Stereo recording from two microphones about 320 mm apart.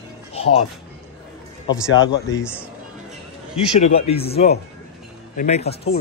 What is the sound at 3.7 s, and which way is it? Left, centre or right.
Speech, centre.